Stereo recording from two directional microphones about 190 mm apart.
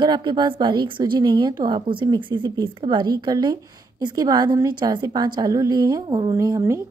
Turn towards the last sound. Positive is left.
turn(degrees=-15)  # may be behind; listen again after turning